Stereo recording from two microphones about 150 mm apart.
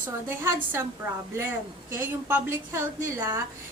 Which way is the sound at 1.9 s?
15° right (ahead or behind).